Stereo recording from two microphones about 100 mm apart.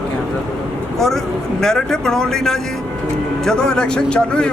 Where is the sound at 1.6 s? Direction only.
5° left (ahead or behind).